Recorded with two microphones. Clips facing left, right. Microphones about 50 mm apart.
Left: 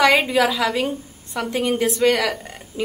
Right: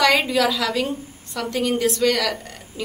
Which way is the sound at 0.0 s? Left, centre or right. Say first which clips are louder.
Left 2 dB; centre.